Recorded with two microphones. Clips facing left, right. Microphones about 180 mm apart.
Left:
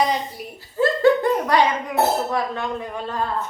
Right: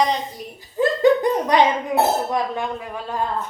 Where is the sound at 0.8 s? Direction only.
15° right (ahead or behind).